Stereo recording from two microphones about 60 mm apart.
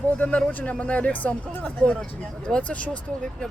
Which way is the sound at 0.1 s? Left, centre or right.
Left.